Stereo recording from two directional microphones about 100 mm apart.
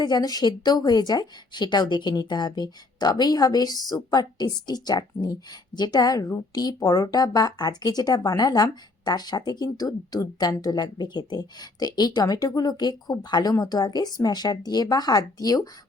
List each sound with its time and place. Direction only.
0.0 s speech: 45° left (ahead or behind)